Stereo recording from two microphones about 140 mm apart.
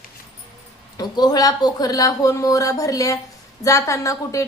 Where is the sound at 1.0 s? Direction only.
30° left (ahead or behind).